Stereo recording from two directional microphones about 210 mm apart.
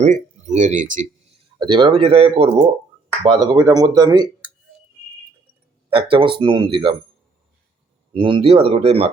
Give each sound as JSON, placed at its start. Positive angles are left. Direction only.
{"t": 0.0, "sound": "speech", "side_deg": -35}
{"t": 1.5, "sound": "speech", "side_deg": -20}
{"t": 5.9, "sound": "speech", "side_deg": -25}
{"t": 8.1, "sound": "speech", "side_deg": -25}